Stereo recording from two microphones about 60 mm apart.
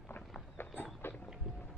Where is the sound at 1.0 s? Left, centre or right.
Left.